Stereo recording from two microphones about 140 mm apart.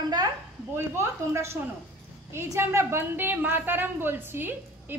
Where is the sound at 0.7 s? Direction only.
20° right (ahead or behind).